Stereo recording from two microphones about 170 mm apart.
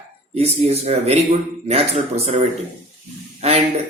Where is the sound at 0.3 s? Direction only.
35° right (ahead or behind).